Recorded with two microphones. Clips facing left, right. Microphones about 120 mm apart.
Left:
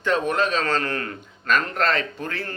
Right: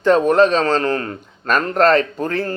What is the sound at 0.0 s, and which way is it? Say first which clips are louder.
Speech: right 9 dB; 40° right (ahead or behind).